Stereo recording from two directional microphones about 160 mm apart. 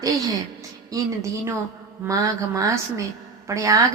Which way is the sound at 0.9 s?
20° right (ahead or behind).